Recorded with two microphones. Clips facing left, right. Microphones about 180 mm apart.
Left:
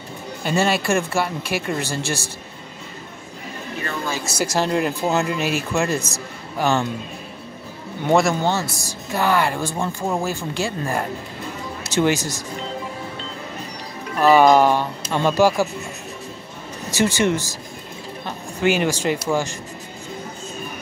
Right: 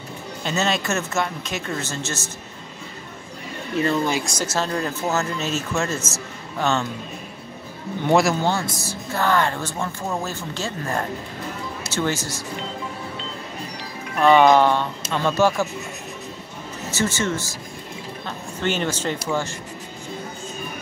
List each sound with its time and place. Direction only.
0.4 s speech: 10° left (ahead or behind)
3.8 s speech: 20° right (ahead or behind)
4.2 s speech: 10° left (ahead or behind)
8.1 s speech: centre (ahead or behind); by 12.4 s 15° left (ahead or behind)
14.2 s speech: 10° left (ahead or behind)
16.9 s speech: 15° left (ahead or behind)
18.2 s a sound: 10° left (ahead or behind)